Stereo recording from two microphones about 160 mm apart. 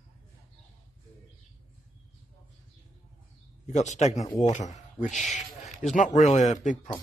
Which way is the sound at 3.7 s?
45° left (ahead or behind).